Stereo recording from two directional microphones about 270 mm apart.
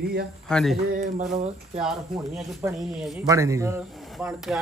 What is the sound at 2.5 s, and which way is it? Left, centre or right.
Speech, centre.